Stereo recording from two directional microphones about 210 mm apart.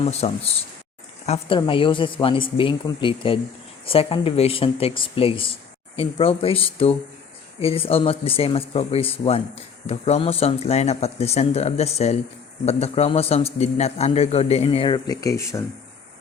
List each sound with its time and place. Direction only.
0.0 s a man's voice: 30° left (ahead or behind); by 15.6 s 15° left (ahead or behind)